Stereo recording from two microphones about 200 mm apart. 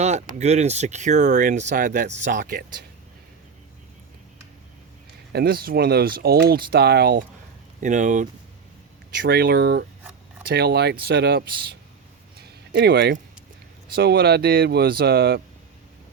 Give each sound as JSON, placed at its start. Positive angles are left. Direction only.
{"t": 0.0, "sound": "speech", "side_deg": -35}
{"t": 5.3, "sound": "speech", "side_deg": -50}
{"t": 7.8, "sound": "speech", "side_deg": -40}
{"t": 9.1, "sound": "speech", "side_deg": -60}
{"t": 10.0, "sound": "a sound", "side_deg": -10}
{"t": 10.4, "sound": "speech", "side_deg": -55}
{"t": 12.4, "sound": "a sound", "side_deg": -55}
{"t": 13.9, "sound": "speech", "side_deg": -50}